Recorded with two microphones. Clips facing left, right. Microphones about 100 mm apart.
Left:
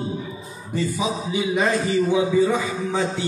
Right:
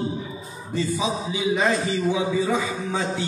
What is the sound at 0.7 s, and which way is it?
A man's voice, 20° right (ahead or behind).